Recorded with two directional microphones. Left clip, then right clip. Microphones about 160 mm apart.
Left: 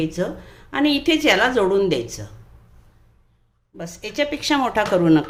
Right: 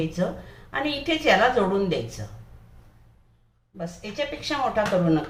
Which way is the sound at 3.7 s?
60° left (ahead or behind).